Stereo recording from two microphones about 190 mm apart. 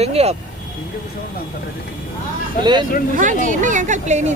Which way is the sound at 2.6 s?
25° right (ahead or behind).